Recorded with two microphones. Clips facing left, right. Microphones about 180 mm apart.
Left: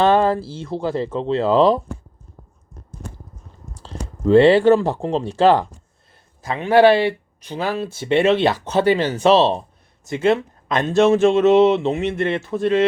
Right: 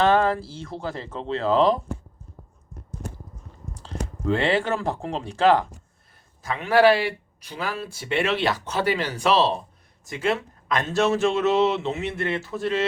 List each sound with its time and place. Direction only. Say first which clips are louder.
0.2 s speech: left 4 dB; 30° left (ahead or behind)
4.3 s speech: left 11 dB; 35° left (ahead or behind)